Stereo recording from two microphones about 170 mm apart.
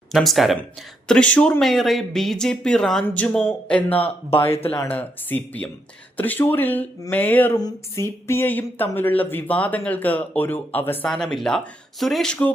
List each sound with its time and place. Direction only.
0.1 s speech: centre (ahead or behind)
4.3 s speech: 35° left (ahead or behind)
4.8 s speech: 10° left (ahead or behind)